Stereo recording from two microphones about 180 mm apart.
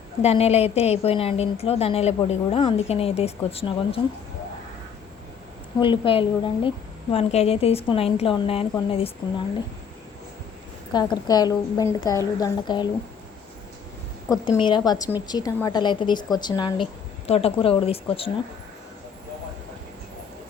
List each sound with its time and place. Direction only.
0.2 s a woman's voice: 35° left (ahead or behind)
5.8 s a woman's voice: 30° left (ahead or behind)
10.9 s speech: 25° left (ahead or behind)
14.5 s speech: 25° left (ahead or behind)